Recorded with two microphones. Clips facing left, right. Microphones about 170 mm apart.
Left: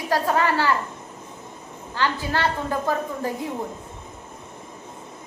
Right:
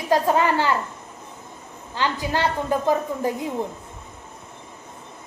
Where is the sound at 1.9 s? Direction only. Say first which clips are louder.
Right 1 dB; 15° right (ahead or behind).